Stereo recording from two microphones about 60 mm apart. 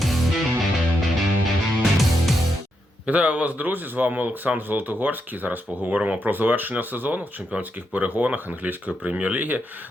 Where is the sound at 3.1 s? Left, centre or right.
Right.